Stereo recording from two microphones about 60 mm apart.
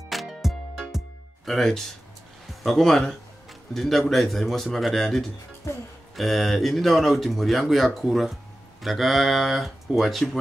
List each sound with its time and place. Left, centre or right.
0.1 s music: centre
2.6 s speech: centre
5.7 s speech: left
6.1 s speech: centre